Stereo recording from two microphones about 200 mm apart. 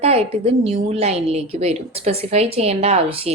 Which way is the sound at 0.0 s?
30° right (ahead or behind).